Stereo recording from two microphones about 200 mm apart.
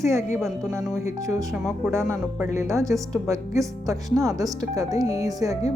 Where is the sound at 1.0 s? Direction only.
15° right (ahead or behind).